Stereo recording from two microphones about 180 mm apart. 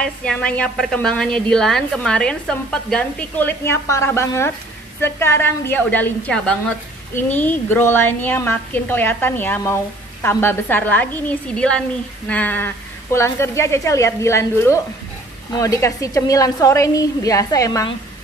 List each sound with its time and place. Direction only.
0.0 s a woman's voice: 5° left (ahead or behind)